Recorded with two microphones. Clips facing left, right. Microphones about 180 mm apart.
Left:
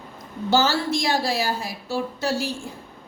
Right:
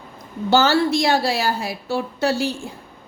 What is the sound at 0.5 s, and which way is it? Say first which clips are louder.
A woman's voice: right 4 dB; 65° right (ahead or behind).